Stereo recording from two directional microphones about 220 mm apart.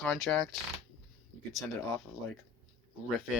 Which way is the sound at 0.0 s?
5° left (ahead or behind).